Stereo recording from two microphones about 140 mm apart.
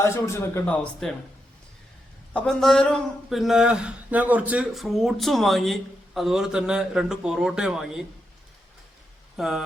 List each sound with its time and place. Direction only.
0.0 s a man's voice: 20° left (ahead or behind)
2.3 s speech: 5° left (ahead or behind)
9.4 s speech: centre (ahead or behind)